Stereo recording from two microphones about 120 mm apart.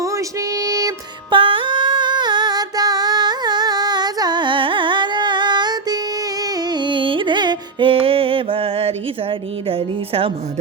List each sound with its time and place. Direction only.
0.0 s music: 30° right (ahead or behind)
1.3 s music: 45° right (ahead or behind)
9.6 s speech: 50° right (ahead or behind)